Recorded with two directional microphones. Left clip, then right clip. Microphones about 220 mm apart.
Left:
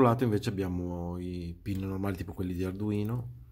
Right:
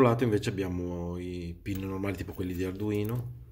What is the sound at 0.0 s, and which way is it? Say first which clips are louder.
Speech: right 1 dB; 25° left (ahead or behind).